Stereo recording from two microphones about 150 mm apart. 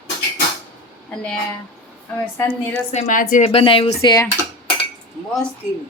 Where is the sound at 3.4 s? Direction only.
40° left (ahead or behind).